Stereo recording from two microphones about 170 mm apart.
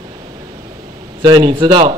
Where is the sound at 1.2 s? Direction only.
25° right (ahead or behind).